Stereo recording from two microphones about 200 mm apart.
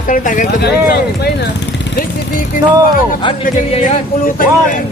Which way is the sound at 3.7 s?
35° left (ahead or behind).